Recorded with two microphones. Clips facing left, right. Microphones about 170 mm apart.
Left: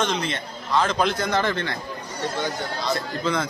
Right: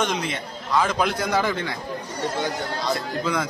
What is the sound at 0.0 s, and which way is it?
A man's voice, 10° right (ahead or behind).